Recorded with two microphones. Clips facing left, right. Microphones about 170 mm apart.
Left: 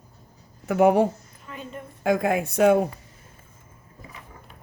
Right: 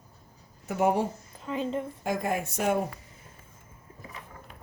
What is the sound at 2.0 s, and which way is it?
Speech, 70° left (ahead or behind).